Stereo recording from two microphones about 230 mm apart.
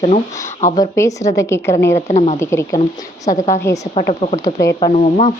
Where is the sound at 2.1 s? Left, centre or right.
Left.